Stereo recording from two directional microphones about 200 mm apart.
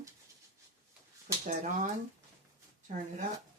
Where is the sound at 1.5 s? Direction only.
40° right (ahead or behind).